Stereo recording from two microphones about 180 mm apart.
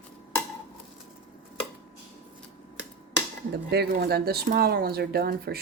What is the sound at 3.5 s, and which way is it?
Speech, 65° right (ahead or behind).